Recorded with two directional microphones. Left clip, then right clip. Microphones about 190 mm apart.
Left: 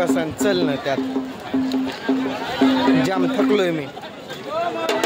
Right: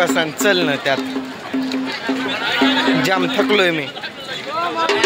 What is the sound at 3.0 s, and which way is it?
Speech, 5° left (ahead or behind).